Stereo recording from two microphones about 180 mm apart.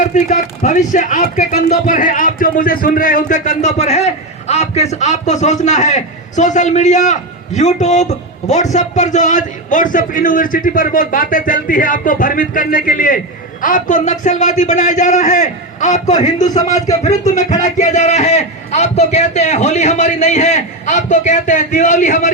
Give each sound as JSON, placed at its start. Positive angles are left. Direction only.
{"t": 0.0, "sound": "a man's voice", "side_deg": 45}
{"t": 16.5, "sound": "a man's voice", "side_deg": 20}
{"t": 17.0, "sound": "speech", "side_deg": 40}